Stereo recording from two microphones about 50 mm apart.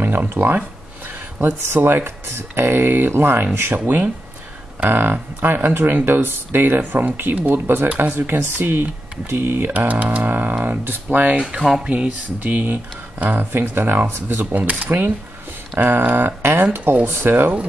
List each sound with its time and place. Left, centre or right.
0.3 s speech: right
11.8 s speech: centre
13.5 s speech: right
14.4 s speech: right